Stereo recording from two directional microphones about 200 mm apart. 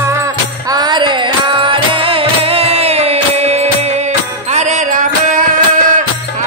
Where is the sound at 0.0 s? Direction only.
15° right (ahead or behind); by 5.0 s 35° right (ahead or behind).